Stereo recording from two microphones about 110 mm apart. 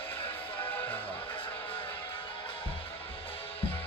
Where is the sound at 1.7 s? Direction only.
55° left (ahead or behind).